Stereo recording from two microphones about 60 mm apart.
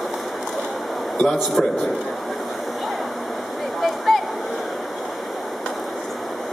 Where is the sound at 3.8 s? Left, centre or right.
Centre.